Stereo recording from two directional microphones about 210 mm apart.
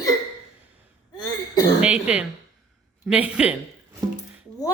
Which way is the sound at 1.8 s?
5° right (ahead or behind).